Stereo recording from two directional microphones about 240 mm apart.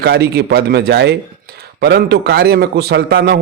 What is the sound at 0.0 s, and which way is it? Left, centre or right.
A man's voice, right.